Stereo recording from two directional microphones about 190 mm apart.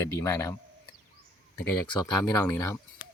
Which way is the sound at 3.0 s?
10° right (ahead or behind).